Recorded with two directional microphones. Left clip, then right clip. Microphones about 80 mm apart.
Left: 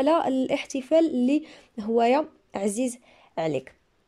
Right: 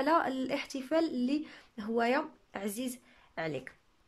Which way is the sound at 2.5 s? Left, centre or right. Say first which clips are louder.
Left 11 dB; left.